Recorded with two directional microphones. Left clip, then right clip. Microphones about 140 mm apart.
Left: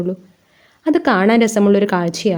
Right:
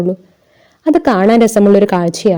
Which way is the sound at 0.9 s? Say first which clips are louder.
Right 4 dB; 40° right (ahead or behind).